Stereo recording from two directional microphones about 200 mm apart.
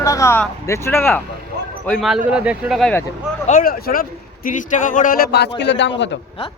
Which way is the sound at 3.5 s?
45° left (ahead or behind).